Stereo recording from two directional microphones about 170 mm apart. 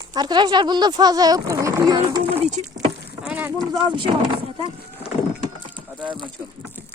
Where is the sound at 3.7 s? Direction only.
30° right (ahead or behind).